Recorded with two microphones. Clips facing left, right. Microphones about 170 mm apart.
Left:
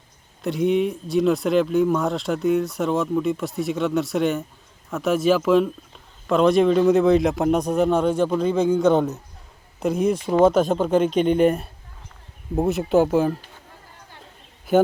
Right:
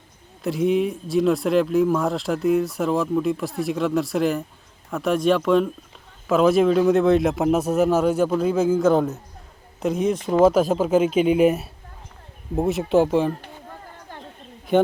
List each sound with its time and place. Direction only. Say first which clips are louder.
0.4 s speech: even; centre (ahead or behind)
13.4 s chatter: right 7 dB; 55° right (ahead or behind)
14.7 s speech: left 1 dB; 5° left (ahead or behind)